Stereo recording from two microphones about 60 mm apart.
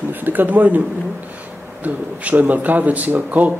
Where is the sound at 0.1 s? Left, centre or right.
Right.